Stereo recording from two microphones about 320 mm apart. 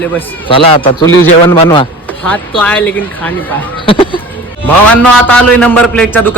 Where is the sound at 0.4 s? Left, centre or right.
Centre.